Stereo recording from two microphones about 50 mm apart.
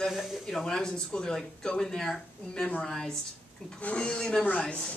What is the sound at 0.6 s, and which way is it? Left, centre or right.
A man's voice, centre.